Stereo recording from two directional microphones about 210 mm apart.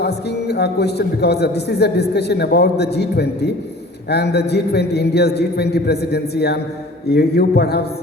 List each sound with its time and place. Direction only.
0.0 s a man's voice: 50° left (ahead or behind)